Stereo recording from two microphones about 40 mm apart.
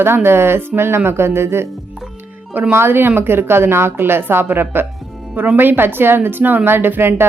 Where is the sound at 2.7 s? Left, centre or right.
Right.